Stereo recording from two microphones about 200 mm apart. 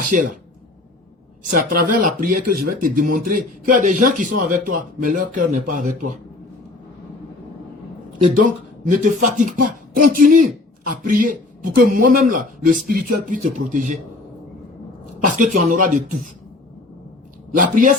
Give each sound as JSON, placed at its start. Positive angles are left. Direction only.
{"t": 0.0, "sound": "speech", "side_deg": -40}
{"t": 1.5, "sound": "speech", "side_deg": -45}
{"t": 8.4, "sound": "speech", "side_deg": -40}
{"t": 15.2, "sound": "speech", "side_deg": -40}
{"t": 17.6, "sound": "speech", "side_deg": -40}